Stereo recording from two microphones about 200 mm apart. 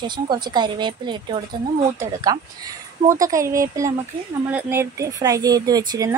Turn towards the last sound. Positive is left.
turn(degrees=-20)  # may be behind; listen again after turning